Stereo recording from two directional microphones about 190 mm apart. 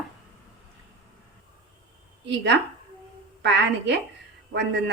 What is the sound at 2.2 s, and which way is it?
A woman's voice, 65° right (ahead or behind).